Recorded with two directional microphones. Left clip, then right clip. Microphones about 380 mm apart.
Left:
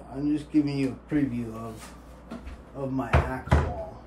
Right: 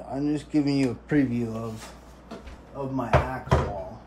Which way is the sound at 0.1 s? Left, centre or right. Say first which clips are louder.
Even; centre.